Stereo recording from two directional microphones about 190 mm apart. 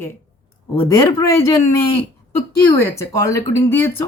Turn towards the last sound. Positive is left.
turn(degrees=10)  # may be behind; listen again after turning